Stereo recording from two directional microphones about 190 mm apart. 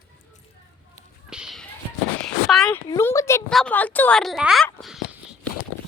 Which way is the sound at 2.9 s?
15° left (ahead or behind).